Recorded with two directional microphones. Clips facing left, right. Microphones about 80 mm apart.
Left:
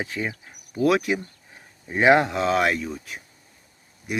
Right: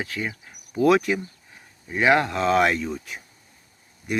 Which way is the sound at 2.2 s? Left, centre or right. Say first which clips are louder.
Right 1 dB; centre.